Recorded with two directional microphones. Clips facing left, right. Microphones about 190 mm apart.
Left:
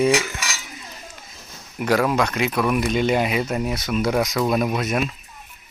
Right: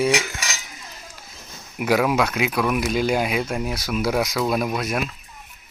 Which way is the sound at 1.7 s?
10° right (ahead or behind).